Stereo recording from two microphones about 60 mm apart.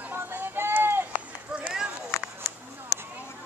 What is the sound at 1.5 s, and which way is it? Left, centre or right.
Run, centre.